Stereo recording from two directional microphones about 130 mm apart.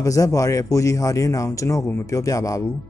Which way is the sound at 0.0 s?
25° left (ahead or behind).